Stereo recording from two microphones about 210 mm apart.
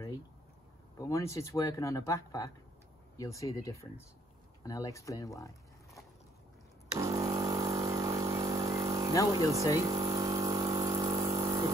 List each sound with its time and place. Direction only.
0.9 s speech: 15° left (ahead or behind)
7.0 s vehicle: 15° right (ahead or behind)
8.7 s a sound: 25° right (ahead or behind)
9.3 s speech: 15° right (ahead or behind)
9.8 s mains hum: 15° right (ahead or behind)
10.8 s pump: 15° right (ahead or behind)